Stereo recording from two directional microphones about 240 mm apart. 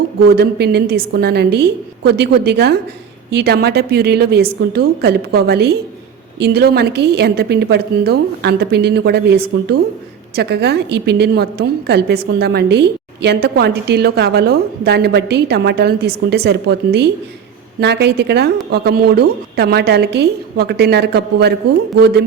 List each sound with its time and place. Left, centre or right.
0.3 s a woman's voice: right